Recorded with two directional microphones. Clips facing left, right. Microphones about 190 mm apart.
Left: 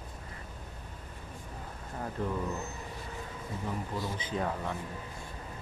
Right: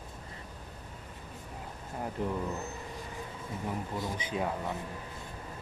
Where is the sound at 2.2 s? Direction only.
15° right (ahead or behind).